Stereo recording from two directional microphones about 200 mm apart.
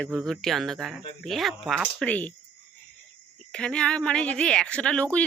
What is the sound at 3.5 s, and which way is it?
Speech, 5° left (ahead or behind).